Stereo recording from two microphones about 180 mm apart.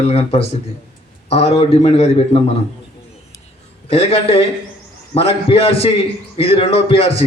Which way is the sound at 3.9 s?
35° left (ahead or behind).